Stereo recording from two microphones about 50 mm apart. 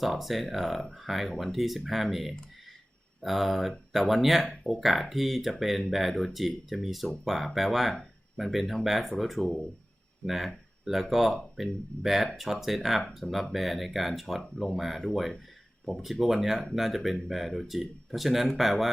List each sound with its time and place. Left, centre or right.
0.0 s speech: centre